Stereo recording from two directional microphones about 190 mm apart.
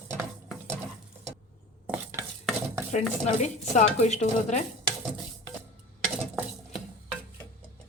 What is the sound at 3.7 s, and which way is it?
Speech, 35° left (ahead or behind).